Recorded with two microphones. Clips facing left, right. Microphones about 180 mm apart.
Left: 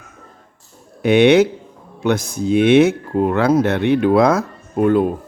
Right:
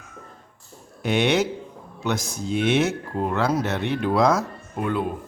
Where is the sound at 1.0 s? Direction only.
60° left (ahead or behind).